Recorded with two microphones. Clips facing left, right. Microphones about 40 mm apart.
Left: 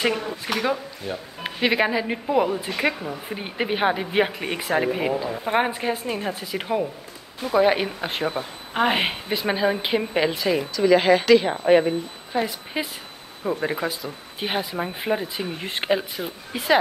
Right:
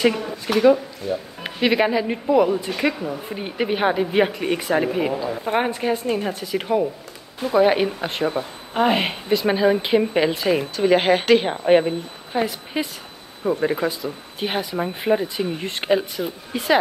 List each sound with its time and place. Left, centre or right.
0.0 s speech: centre
8.3 s speech: centre
10.3 s a woman's voice: centre
10.7 s speech: right
12.3 s a woman's voice: centre
12.7 s speech: centre
14.6 s speech: centre
14.9 s speech: centre